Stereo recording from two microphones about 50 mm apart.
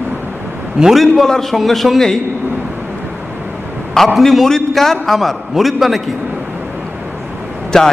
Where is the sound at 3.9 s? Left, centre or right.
Centre.